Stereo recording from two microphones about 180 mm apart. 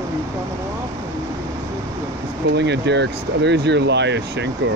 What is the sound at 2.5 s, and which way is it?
Speech, 75° right (ahead or behind).